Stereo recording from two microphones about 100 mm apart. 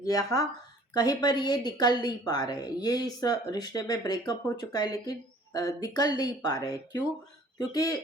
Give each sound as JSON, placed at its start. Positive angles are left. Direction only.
{"t": 0.0, "sound": "a woman's voice", "side_deg": 35}